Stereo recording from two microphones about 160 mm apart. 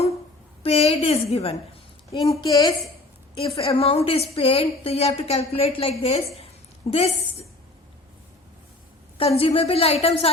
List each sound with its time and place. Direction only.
0.6 s a woman's voice: 40° left (ahead or behind)
2.3 s a woman's voice: 25° left (ahead or behind)
3.3 s a woman's voice: 35° left (ahead or behind)
9.1 s a woman's voice: 35° left (ahead or behind)